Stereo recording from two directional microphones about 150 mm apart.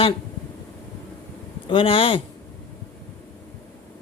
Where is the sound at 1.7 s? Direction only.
35° left (ahead or behind).